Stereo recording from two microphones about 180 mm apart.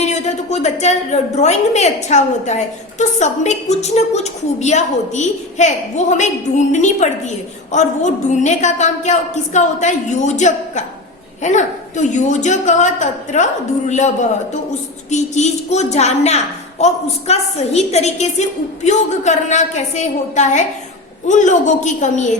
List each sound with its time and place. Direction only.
0.0 s a woman's voice: 40° left (ahead or behind)